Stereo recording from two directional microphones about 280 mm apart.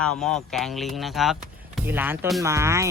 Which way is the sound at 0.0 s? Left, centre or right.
Centre.